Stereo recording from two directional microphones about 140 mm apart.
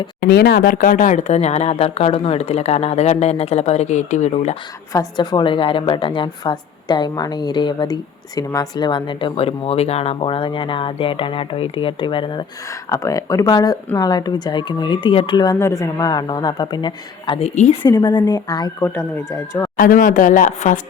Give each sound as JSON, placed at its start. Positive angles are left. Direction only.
{"t": 0.2, "sound": "speech", "side_deg": 90}
{"t": 4.9, "sound": "speech", "side_deg": 25}
{"t": 12.9, "sound": "speech", "side_deg": 25}
{"t": 17.4, "sound": "speech", "side_deg": 55}
{"t": 17.8, "sound": "speech", "side_deg": 30}
{"t": 19.7, "sound": "speech", "side_deg": 90}